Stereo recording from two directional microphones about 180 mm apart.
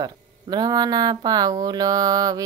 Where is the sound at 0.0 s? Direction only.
20° right (ahead or behind).